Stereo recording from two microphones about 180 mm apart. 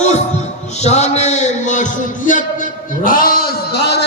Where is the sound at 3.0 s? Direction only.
50° left (ahead or behind).